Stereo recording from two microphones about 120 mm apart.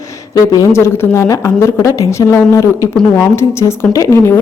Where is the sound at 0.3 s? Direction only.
30° left (ahead or behind).